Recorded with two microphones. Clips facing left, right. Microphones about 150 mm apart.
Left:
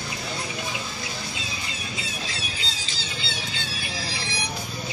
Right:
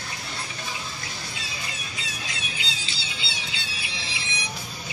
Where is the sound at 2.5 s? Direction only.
40° left (ahead or behind).